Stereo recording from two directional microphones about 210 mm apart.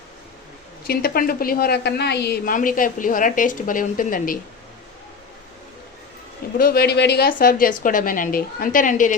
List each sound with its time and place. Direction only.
0.9 s a woman's voice: 45° left (ahead or behind)
6.6 s a woman's voice: 45° left (ahead or behind)